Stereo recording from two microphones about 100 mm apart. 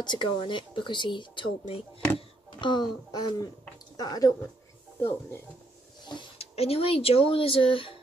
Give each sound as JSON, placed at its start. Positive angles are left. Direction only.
{"t": 0.0, "sound": "speech", "side_deg": 45}
{"t": 2.1, "sound": "speech", "side_deg": 50}
{"t": 6.3, "sound": "speech", "side_deg": 85}